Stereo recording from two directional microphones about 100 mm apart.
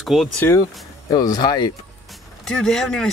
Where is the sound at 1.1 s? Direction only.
45° left (ahead or behind).